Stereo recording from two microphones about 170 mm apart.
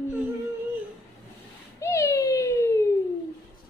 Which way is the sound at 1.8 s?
20° left (ahead or behind).